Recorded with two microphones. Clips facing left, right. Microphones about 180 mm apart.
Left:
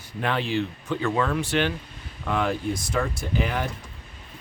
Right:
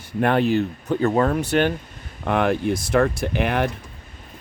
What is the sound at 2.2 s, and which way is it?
Speech, 60° right (ahead or behind).